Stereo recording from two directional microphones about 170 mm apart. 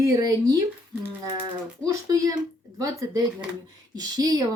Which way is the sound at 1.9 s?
20° right (ahead or behind).